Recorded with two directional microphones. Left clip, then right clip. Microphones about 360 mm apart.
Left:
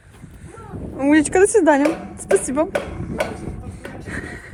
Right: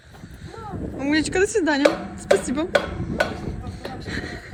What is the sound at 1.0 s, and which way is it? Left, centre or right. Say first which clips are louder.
Speech: left 6 dB; centre.